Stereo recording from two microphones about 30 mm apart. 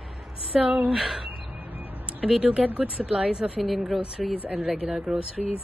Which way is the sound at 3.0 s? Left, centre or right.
Centre.